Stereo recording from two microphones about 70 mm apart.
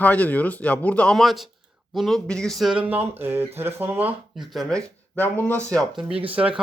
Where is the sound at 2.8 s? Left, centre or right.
Right.